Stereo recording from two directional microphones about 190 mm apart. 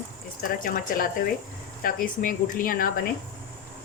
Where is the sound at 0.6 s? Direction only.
45° left (ahead or behind).